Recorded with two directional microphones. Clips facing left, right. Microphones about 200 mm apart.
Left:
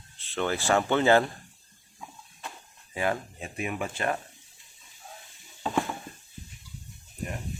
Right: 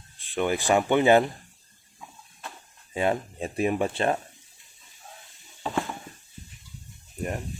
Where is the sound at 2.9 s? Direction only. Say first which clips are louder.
Right 4 dB; 25° right (ahead or behind).